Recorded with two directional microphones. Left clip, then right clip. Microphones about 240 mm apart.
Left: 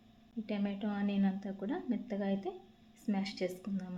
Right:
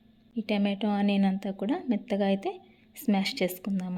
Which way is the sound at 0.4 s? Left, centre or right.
Right.